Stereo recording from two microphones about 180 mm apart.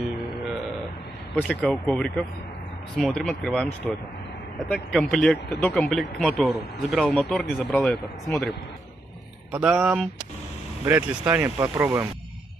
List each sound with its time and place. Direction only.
1.3 s speech: 5° left (ahead or behind)
9.5 s speech: 5° right (ahead or behind)
11.5 s speech: 25° right (ahead or behind)
11.8 s speech: 15° right (ahead or behind)